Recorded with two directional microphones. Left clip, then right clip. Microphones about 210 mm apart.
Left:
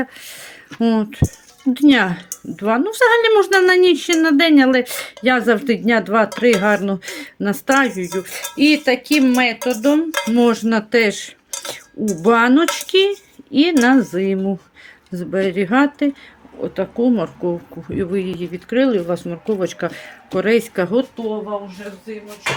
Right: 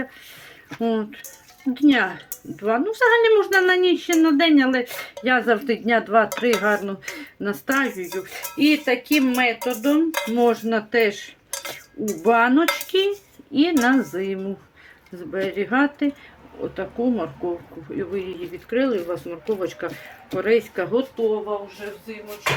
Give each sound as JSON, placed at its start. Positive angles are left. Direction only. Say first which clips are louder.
{"t": 0.8, "sound": "speech", "louder": "left 5 dB", "side_deg": 50}
{"t": 16.6, "sound": "speech", "louder": "left 6 dB", "side_deg": 40}
{"t": 17.9, "sound": "speech", "louder": "left 6 dB", "side_deg": 55}